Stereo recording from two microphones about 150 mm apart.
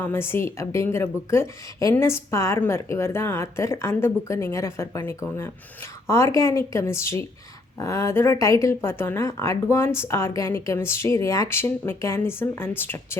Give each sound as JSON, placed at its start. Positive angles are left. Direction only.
{"t": 0.0, "sound": "speech", "side_deg": 15}